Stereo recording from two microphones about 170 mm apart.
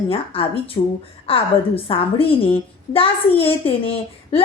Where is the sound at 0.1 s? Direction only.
35° left (ahead or behind).